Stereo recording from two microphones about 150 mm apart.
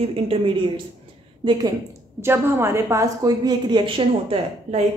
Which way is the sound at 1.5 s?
25° right (ahead or behind).